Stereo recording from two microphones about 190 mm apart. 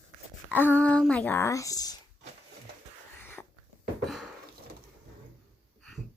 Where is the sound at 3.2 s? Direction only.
10° left (ahead or behind).